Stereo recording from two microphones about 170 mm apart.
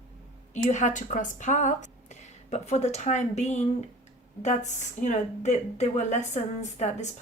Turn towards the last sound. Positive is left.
turn(degrees=40)  # may be behind; listen again after turning